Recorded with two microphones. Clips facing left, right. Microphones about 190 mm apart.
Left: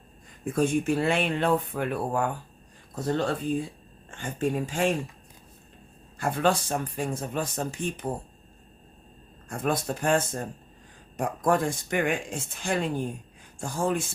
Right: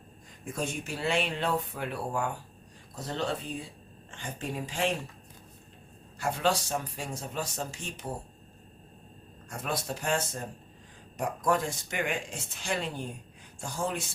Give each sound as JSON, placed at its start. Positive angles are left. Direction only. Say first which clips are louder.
{"t": 0.5, "sound": "speech", "louder": "left 11 dB", "side_deg": 55}
{"t": 6.1, "sound": "speech", "louder": "left 4 dB", "side_deg": 55}
{"t": 9.5, "sound": "speech", "louder": "left 6 dB", "side_deg": 50}